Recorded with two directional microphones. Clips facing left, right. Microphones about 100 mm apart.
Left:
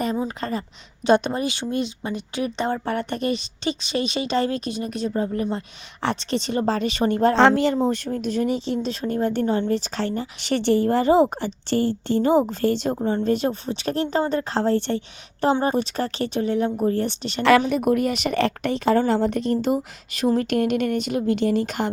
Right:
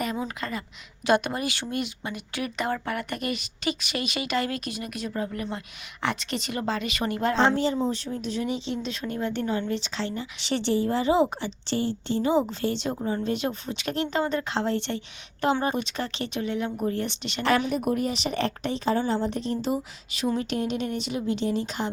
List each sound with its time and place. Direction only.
0.3 s speech: 35° left (ahead or behind)
1.0 s speech: 25° left (ahead or behind)
7.3 s speech: 75° left (ahead or behind)
7.9 s speech: 55° left (ahead or behind)
13.0 s speech: 30° left (ahead or behind)
17.7 s speech: 75° left (ahead or behind); by 21.8 s 55° left (ahead or behind)